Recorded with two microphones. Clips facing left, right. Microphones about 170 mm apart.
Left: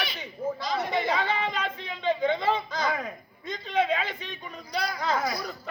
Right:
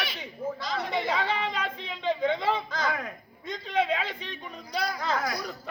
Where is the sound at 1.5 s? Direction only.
5° right (ahead or behind).